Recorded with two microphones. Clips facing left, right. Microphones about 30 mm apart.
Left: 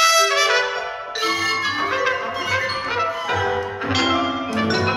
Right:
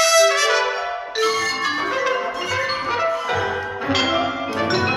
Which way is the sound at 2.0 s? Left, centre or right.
Centre.